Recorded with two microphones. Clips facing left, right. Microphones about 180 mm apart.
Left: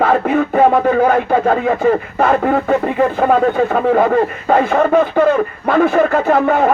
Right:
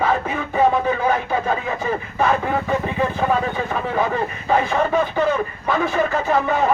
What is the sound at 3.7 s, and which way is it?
Speech, 60° left (ahead or behind).